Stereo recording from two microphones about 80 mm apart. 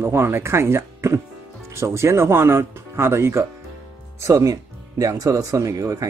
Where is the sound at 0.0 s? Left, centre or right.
Right.